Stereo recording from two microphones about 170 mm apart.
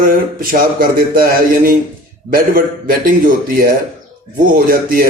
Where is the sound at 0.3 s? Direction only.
55° right (ahead or behind).